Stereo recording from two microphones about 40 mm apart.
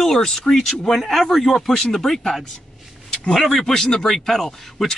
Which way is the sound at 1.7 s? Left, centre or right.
Centre.